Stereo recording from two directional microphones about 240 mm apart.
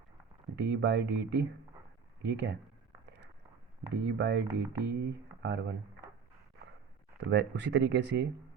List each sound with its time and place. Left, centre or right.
0.5 s speech: right
3.9 s speech: right
7.3 s speech: right